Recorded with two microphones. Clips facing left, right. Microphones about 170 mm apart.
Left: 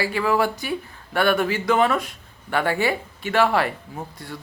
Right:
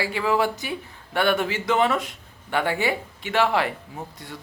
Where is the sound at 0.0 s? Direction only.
20° right (ahead or behind).